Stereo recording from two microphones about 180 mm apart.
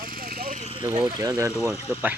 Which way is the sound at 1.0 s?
20° right (ahead or behind).